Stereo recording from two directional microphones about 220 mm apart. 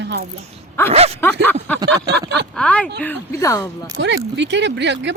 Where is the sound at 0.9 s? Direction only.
30° right (ahead or behind).